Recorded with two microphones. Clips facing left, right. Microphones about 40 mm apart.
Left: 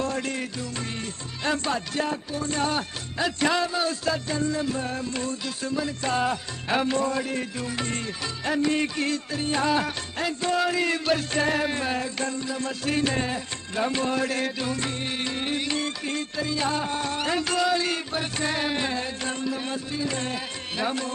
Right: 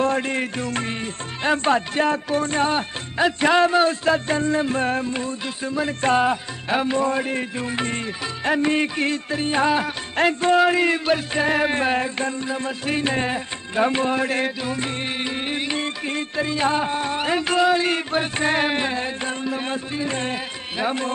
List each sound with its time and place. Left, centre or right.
0.0 s music: right
2.0 s music: right
2.5 s music: right
5.1 s music: right
5.8 s music: right
6.2 s music: centre
7.1 s music: right
10.1 s music: right
18.9 s music: right